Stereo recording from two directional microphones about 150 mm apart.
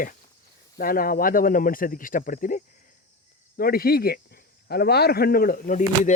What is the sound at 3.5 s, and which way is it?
Speech, 90° left.